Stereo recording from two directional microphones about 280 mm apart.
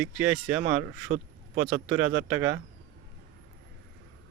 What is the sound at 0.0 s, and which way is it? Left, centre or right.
Speech, centre.